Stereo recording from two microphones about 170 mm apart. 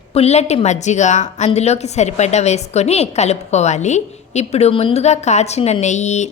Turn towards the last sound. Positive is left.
turn(degrees=40)  # may be behind; listen again after turning